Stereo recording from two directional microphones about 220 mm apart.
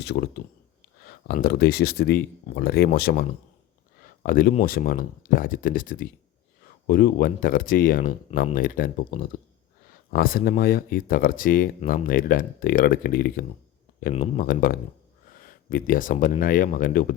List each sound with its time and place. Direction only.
0.0 s speech: 50° left (ahead or behind)